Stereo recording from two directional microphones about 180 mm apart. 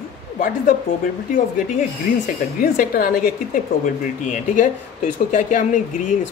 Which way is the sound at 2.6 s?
50° left (ahead or behind).